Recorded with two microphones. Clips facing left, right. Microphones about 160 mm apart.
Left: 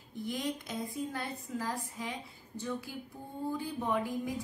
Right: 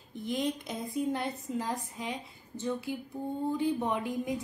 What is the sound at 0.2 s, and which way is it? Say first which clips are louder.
A woman's voice: right 4 dB; 20° right (ahead or behind).